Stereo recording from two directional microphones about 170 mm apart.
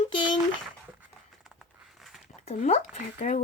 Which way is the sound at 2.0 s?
Centre (ahead or behind).